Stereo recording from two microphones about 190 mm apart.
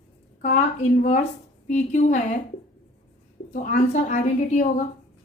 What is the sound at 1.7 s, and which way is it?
Speech, 40° left (ahead or behind).